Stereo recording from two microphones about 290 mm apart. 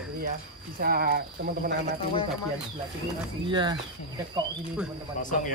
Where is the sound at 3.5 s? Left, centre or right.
Centre.